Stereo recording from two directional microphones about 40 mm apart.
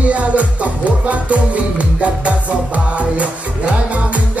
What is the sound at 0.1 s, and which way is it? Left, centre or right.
Music, right.